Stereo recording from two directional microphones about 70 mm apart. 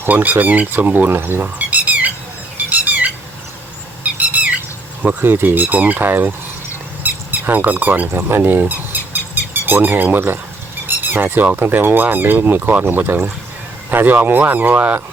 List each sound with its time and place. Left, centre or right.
0.0 s speech: right
2.6 s squeak: right
4.0 s squawk: right
5.0 s speech: right
7.0 s a sound: right
11.4 s speech: right